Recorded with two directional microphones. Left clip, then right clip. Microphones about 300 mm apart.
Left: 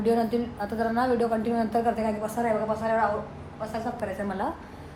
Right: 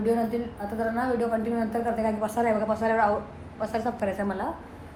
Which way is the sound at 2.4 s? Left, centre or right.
Right.